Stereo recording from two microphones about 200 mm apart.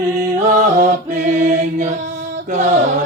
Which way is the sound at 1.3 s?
35° right (ahead or behind).